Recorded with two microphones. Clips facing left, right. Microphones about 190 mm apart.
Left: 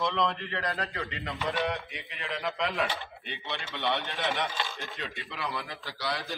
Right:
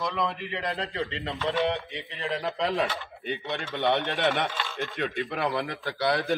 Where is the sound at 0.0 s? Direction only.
5° right (ahead or behind); by 1.0 s 20° right (ahead or behind).